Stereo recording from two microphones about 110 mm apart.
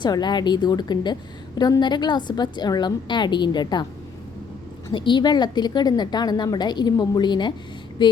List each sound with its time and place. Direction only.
0.0 s a woman's voice: 40° left (ahead or behind)
4.9 s a woman's voice: 45° left (ahead or behind)
8.0 s a sound: 45° left (ahead or behind)